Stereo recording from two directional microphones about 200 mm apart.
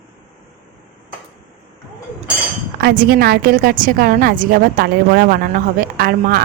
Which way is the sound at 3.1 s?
50° right (ahead or behind).